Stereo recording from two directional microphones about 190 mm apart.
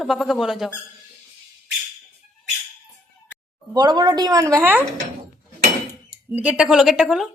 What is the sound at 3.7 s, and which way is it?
A woman's voice, 20° right (ahead or behind).